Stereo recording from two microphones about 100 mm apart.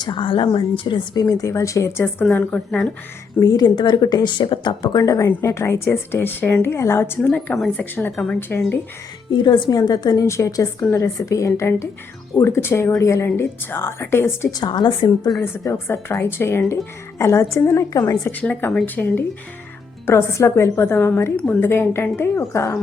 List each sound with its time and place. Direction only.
0.0 s speech: 55° left (ahead or behind); by 2.2 s 25° left (ahead or behind)
2.2 s speech: 15° left (ahead or behind)
3.4 s speech: 40° left (ahead or behind); by 8.1 s 20° left (ahead or behind)
8.1 s speech: 5° left (ahead or behind)
8.4 s speech: 20° left (ahead or behind)
9.3 s speech: 50° left (ahead or behind); by 14.5 s 25° left (ahead or behind)
14.5 s a woman's voice: 45° left (ahead or behind)
15.6 s speech: 25° left (ahead or behind)
20.1 s speech: 25° left (ahead or behind)